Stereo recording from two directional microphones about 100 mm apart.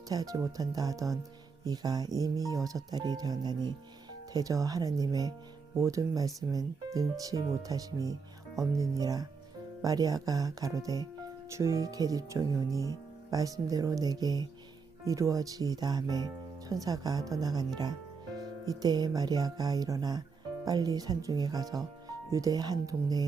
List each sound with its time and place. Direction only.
0.1 s speech: 35° right (ahead or behind)